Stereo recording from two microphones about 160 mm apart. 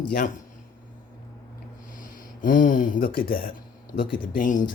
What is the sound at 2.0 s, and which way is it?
Speech, 60° left (ahead or behind).